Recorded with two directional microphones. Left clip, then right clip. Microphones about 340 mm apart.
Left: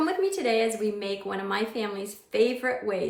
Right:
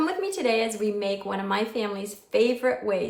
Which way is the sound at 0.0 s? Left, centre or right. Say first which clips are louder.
Even; centre.